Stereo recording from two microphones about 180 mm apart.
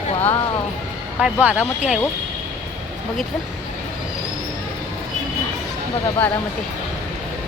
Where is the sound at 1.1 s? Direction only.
5° right (ahead or behind).